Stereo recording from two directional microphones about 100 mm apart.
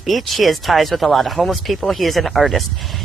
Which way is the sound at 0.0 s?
Centre (ahead or behind).